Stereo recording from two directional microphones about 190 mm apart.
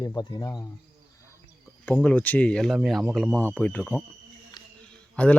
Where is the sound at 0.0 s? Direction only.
20° left (ahead or behind).